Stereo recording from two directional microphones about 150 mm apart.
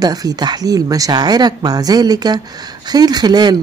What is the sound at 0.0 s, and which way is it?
Speech, 25° right (ahead or behind).